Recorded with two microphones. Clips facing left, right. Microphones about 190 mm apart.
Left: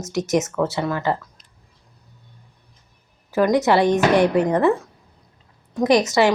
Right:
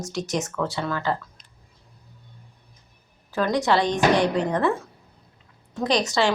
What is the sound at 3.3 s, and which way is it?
Speech, 20° left (ahead or behind).